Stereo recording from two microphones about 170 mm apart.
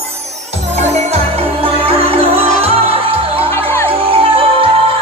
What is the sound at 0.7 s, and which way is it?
Music, 40° right (ahead or behind).